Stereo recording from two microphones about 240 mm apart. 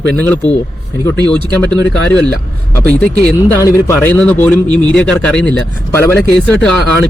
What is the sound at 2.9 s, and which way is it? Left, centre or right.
A man's voice, centre.